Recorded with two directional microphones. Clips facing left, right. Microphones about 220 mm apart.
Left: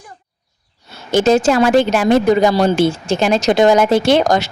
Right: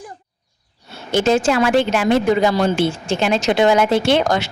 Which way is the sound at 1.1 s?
40° left (ahead or behind).